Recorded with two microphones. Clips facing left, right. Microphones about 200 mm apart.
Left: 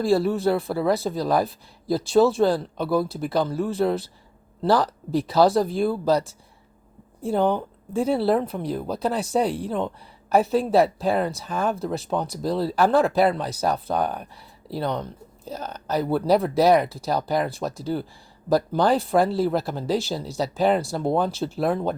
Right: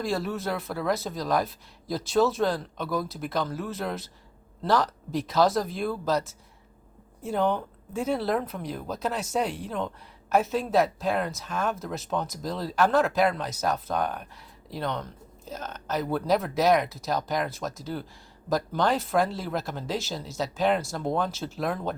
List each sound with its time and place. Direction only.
0.0 s speech: 30° left (ahead or behind)